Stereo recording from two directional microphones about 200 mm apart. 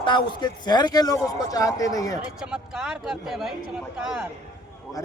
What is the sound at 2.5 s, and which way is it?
Speech, 5° right (ahead or behind).